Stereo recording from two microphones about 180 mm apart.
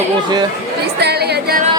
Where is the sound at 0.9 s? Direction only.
65° right (ahead or behind).